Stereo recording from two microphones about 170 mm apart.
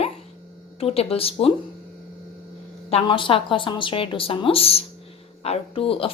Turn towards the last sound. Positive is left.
turn(degrees=35)  # may be behind; listen again after turning